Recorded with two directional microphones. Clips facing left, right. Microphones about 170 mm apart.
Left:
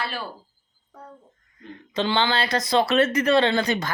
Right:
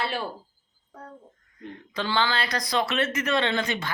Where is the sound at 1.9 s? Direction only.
25° left (ahead or behind).